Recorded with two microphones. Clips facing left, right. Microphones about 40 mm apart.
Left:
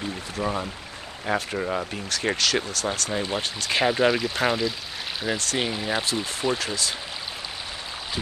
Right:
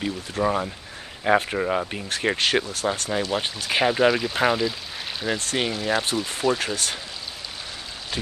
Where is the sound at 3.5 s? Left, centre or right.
Centre.